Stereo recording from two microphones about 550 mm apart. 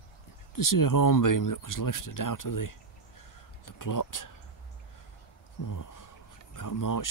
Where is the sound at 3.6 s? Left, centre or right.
Left.